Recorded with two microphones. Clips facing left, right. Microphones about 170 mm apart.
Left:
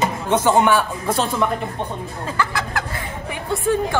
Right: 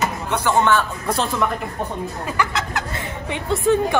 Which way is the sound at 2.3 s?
20° right (ahead or behind).